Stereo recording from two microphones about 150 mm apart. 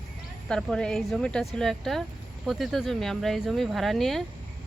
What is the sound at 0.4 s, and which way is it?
Speech, 5° left (ahead or behind).